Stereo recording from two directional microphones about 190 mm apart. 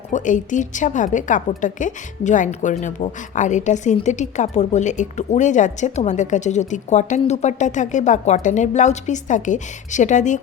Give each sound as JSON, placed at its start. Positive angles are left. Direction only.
{"t": 0.1, "sound": "a woman's voice", "side_deg": 40}